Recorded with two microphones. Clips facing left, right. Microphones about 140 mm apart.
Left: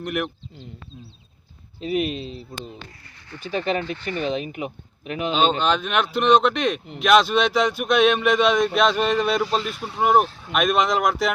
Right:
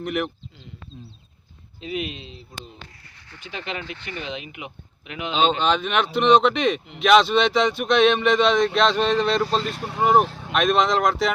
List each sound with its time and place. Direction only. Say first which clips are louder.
0.0 s speech: right 1 dB; centre (ahead or behind)
1.8 s speech: left 6 dB; 35° left (ahead or behind)
5.3 s speech: even; centre (ahead or behind)